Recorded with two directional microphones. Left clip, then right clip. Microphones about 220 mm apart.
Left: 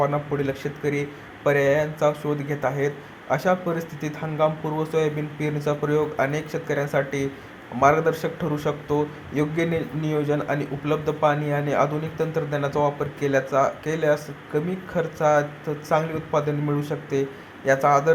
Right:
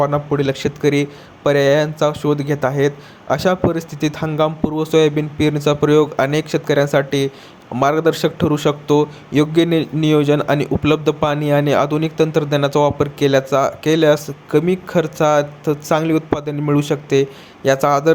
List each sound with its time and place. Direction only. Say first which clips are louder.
0.0 s speech: right 6 dB; 35° right (ahead or behind)